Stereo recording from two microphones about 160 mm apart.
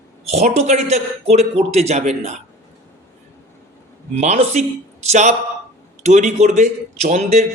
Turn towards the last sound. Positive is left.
turn(degrees=-45)  # may be behind; listen again after turning